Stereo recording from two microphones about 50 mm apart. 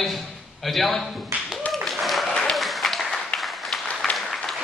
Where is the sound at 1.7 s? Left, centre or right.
Centre.